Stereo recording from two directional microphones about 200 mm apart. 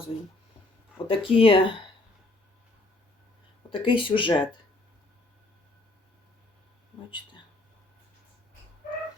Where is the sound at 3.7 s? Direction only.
25° left (ahead or behind).